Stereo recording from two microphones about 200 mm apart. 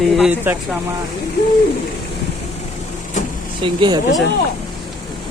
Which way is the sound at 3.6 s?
25° right (ahead or behind).